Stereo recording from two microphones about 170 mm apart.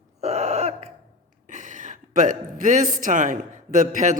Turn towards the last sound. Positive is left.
turn(degrees=-45)  # may be behind; listen again after turning